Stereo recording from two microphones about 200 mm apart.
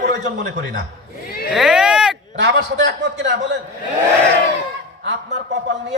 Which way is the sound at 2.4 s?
65° right (ahead or behind).